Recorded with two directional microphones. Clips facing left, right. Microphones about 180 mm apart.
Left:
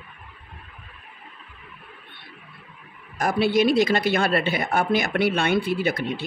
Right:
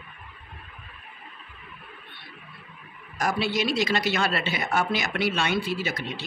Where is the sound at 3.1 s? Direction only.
55° left (ahead or behind).